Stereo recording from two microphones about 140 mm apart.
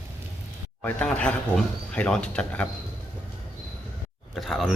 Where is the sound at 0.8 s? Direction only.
10° left (ahead or behind).